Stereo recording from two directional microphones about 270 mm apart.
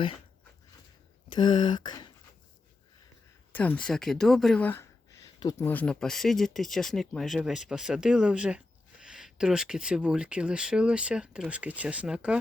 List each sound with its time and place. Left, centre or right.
1.3 s speech: centre
3.5 s speech: centre